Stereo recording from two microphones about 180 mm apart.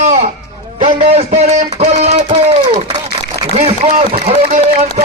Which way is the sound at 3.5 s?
40° right (ahead or behind).